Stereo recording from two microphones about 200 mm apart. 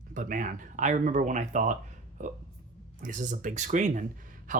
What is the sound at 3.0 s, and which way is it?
Speech, 40° right (ahead or behind).